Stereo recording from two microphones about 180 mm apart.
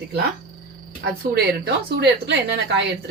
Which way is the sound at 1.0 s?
90° right.